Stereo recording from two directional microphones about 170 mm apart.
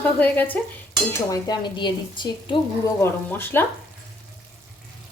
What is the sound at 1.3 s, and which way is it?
A woman's voice, 25° left (ahead or behind).